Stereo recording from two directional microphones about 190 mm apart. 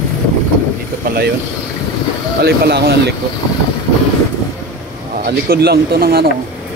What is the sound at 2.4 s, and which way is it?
Speech, 55° right (ahead or behind).